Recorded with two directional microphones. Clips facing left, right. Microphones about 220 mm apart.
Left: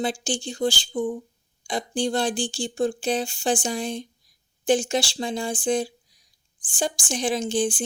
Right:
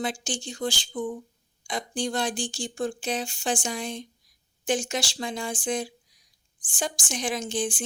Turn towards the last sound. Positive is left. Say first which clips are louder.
# left 5 dB
turn(degrees=30)  # may be behind; listen again after turning